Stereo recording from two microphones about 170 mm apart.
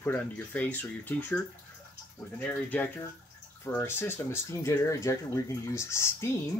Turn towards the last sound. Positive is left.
turn(degrees=15)  # may be behind; listen again after turning